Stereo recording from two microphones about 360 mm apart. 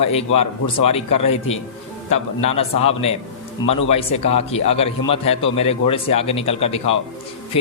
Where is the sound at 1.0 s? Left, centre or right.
Left.